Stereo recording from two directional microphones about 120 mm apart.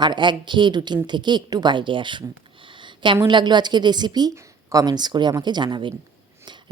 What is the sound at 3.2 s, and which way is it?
Speech, 40° right (ahead or behind).